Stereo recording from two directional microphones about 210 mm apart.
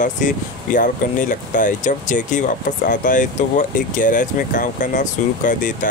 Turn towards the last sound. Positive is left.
turn(degrees=35)  # may be behind; listen again after turning